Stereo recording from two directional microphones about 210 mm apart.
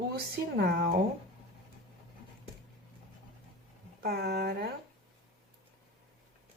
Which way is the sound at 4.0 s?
50° right (ahead or behind).